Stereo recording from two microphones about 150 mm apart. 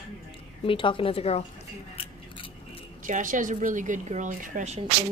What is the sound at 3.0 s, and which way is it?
A woman's voice, 60° right (ahead or behind).